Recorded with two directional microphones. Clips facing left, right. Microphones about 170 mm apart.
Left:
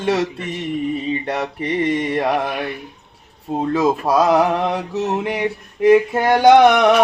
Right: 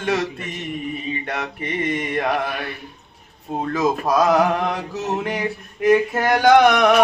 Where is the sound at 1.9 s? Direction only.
30° left (ahead or behind).